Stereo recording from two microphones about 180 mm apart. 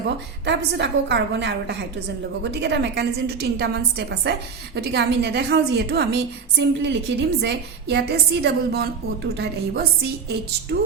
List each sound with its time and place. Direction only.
0.4 s a woman's voice: 70° right (ahead or behind)